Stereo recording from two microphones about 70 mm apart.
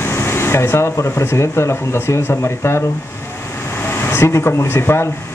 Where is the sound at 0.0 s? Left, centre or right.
Left.